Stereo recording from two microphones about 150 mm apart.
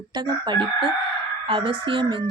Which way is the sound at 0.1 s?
30° right (ahead or behind).